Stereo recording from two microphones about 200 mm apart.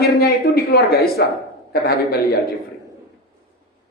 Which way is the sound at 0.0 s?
55° left (ahead or behind).